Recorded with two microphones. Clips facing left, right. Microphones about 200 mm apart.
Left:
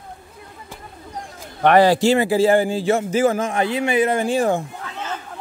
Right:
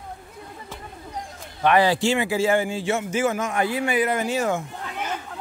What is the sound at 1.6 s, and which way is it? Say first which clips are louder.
A man's voice: left 5 dB; 50° left (ahead or behind).